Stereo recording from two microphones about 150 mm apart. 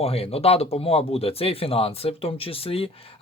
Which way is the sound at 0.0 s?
40° left (ahead or behind).